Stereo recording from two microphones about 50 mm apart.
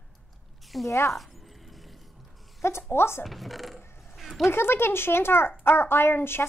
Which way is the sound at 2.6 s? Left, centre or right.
Left.